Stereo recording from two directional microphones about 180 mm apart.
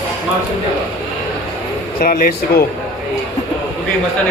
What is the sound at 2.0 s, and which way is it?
Speech, 55° left (ahead or behind).